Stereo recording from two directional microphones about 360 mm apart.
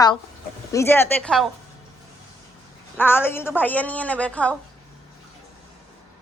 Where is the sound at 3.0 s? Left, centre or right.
Centre.